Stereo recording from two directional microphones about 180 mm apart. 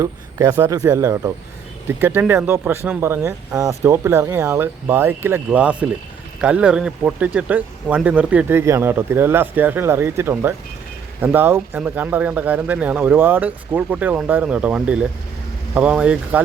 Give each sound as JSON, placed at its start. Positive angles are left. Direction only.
{"t": 0.0, "sound": "speech", "side_deg": -15}